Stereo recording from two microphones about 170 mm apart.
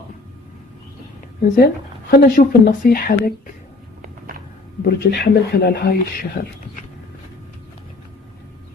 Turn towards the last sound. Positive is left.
turn(degrees=60)  # may be behind; listen again after turning